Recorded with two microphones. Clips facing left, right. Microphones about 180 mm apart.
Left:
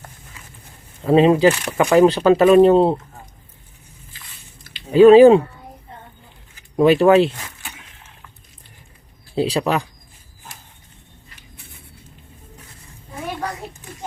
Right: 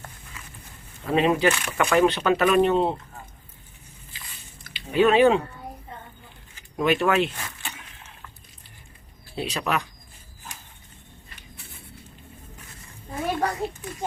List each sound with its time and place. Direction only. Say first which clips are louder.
1.0 s speech: left 8 dB; 30° left (ahead or behind)
4.9 s speech: left 10 dB; 30° left (ahead or behind)
6.7 s speech: left 9 dB; 35° left (ahead or behind)
9.3 s speech: left 8 dB; 30° left (ahead or behind)